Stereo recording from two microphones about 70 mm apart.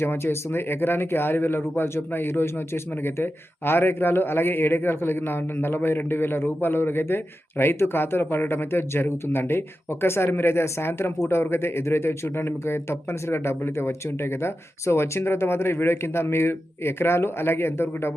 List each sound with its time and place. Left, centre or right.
0.0 s speech: left